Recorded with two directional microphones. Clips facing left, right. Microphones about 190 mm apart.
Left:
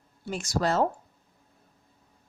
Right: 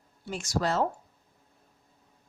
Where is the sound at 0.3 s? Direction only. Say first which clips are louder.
Left 2 dB; 45° left (ahead or behind).